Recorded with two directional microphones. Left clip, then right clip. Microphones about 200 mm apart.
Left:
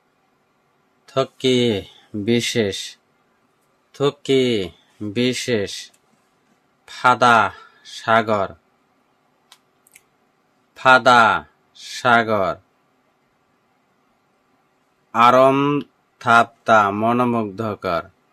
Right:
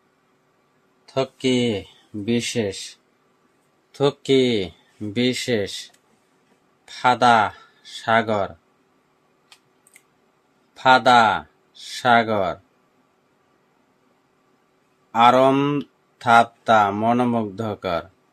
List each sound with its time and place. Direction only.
1.0 s speech: 20° left (ahead or behind)
3.9 s speech: 5° left (ahead or behind)
10.8 s speech: 15° left (ahead or behind)
15.1 s speech: 15° left (ahead or behind)